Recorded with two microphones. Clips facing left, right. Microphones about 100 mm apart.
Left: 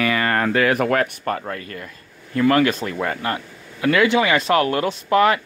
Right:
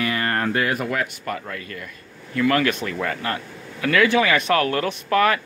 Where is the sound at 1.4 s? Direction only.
35° left (ahead or behind).